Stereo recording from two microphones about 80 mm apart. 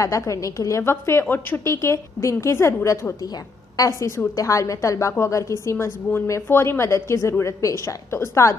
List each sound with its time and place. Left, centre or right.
0.0 s a woman's voice: left